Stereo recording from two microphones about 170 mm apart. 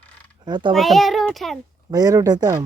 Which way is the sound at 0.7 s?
Centre (ahead or behind).